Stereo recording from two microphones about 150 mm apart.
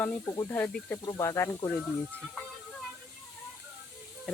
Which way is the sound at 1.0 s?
20° left (ahead or behind).